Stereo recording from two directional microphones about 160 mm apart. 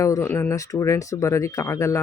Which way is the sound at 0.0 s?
20° left (ahead or behind).